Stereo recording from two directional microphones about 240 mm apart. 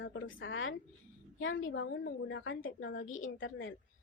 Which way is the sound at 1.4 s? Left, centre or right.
Left.